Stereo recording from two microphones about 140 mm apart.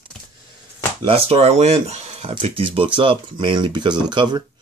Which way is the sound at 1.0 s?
40° right (ahead or behind).